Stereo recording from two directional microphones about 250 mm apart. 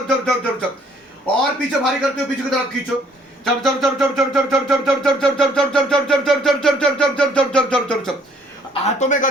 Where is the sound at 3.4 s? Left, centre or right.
Centre.